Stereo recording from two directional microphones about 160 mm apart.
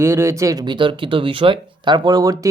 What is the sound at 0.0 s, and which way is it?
Speech, 15° right (ahead or behind).